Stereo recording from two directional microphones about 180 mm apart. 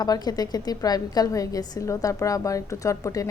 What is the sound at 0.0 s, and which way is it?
A woman's voice, 20° left (ahead or behind).